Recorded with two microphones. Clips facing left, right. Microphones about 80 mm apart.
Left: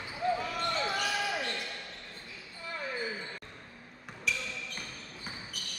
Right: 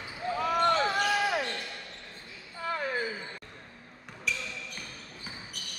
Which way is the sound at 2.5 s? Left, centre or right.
Right.